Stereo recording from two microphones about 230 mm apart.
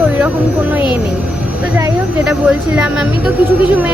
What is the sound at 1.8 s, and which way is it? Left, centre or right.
Speech, centre.